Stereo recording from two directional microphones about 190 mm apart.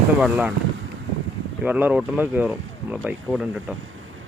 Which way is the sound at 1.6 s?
10° right (ahead or behind).